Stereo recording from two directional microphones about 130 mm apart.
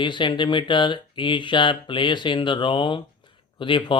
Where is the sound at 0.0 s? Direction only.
40° left (ahead or behind).